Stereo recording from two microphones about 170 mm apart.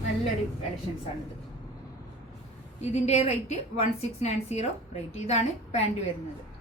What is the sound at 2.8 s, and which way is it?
A woman's voice, 40° left (ahead or behind).